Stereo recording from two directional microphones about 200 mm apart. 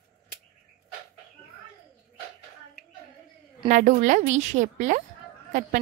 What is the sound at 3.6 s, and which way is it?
A woman's voice, 40° right (ahead or behind).